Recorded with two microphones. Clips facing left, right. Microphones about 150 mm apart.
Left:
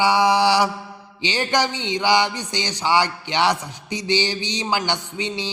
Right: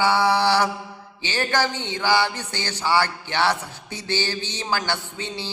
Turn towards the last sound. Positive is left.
turn(degrees=15)  # may be behind; listen again after turning